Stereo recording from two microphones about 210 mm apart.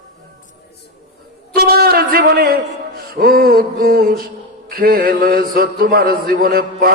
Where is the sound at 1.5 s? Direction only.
45° right (ahead or behind).